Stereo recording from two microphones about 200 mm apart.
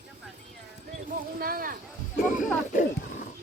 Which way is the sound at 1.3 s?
50° right (ahead or behind).